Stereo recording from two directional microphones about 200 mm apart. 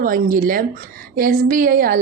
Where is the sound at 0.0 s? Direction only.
45° right (ahead or behind).